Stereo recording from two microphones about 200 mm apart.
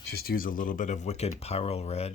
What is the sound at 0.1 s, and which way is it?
Speech, 50° left (ahead or behind).